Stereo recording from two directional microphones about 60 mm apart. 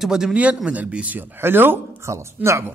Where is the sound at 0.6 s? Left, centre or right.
Right.